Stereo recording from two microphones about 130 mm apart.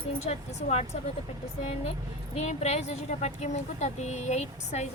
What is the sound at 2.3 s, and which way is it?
A woman's voice, 55° left (ahead or behind).